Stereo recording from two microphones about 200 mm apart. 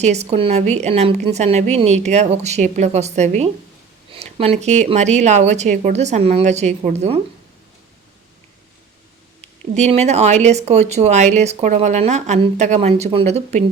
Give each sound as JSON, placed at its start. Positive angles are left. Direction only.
{"t": 0.0, "sound": "speech", "side_deg": -35}
{"t": 9.7, "sound": "speech", "side_deg": -35}